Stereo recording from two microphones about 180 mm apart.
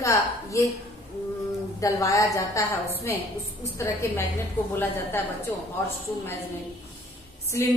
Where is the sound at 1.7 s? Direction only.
20° left (ahead or behind).